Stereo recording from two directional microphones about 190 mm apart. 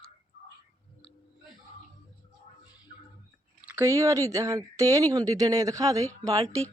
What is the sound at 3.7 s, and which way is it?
Speech, 15° right (ahead or behind).